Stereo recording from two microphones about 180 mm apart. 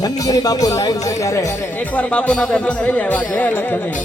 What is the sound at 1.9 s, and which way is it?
Speech, 5° left (ahead or behind).